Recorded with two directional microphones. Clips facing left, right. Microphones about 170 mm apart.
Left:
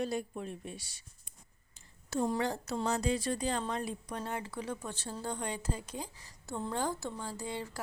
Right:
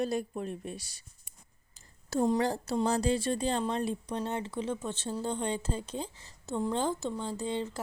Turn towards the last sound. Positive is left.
turn(degrees=-25)  # may be behind; listen again after turning